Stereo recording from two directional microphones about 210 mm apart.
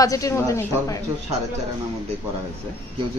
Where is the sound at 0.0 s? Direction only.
15° left (ahead or behind).